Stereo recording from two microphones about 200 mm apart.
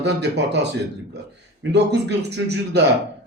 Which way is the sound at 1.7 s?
60° right (ahead or behind).